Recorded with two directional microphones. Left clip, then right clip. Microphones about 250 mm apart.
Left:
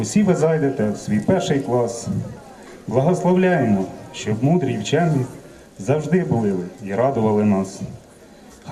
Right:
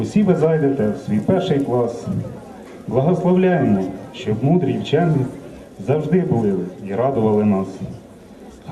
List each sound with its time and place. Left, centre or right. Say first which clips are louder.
0.0 s a man's voice: right 1 dB; left